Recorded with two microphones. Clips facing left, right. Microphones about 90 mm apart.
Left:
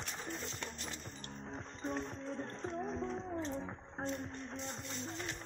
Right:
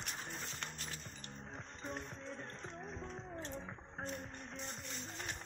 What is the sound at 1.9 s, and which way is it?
Music, 35° left (ahead or behind).